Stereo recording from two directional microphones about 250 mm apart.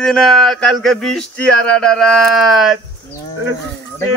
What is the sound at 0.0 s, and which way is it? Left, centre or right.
Speech, centre.